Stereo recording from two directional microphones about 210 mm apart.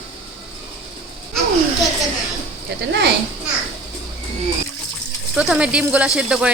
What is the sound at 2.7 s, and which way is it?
Speech, 50° right (ahead or behind).